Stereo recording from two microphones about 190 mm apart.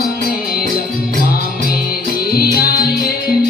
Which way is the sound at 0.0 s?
50° left (ahead or behind).